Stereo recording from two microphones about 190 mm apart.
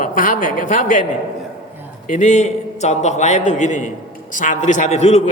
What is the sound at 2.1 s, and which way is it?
A man's voice, 40° left (ahead or behind).